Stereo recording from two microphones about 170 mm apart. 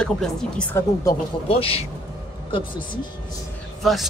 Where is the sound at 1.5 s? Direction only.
35° left (ahead or behind).